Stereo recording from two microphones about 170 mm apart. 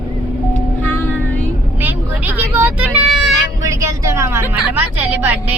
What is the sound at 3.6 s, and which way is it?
A woman's voice, 20° right (ahead or behind).